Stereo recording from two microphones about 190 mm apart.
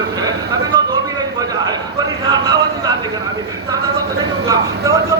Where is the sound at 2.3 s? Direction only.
20° right (ahead or behind).